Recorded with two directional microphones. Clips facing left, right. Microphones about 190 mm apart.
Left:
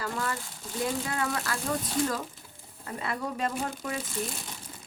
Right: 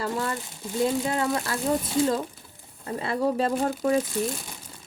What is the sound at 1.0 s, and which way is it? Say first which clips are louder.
Speech: right 5 dB; 25° right (ahead or behind).